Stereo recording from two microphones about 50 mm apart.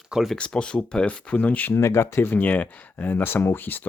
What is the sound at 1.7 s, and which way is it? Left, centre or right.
Speech, left.